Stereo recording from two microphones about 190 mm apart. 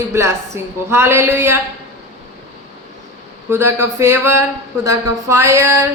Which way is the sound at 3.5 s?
15° right (ahead or behind).